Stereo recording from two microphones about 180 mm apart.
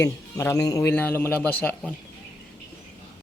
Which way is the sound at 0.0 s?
20° left (ahead or behind).